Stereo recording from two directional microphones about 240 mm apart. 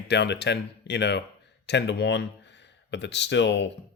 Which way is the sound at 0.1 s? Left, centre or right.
Left.